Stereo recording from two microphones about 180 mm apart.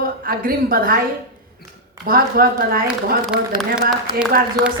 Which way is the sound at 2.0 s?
55° right (ahead or behind).